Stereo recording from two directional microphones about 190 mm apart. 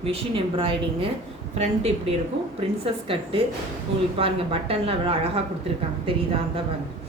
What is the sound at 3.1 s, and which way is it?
A woman's voice, 30° right (ahead or behind).